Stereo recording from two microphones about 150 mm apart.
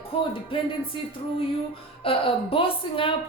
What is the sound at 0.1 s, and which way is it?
Speech, 40° left (ahead or behind).